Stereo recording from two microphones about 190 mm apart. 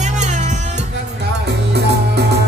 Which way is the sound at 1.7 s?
60° right (ahead or behind).